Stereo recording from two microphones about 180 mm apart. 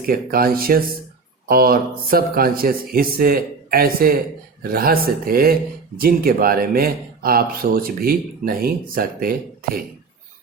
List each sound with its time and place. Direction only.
0.0 s speech: 55° right (ahead or behind)